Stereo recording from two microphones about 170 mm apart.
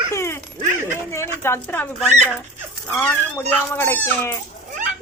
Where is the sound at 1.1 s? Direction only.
15° left (ahead or behind).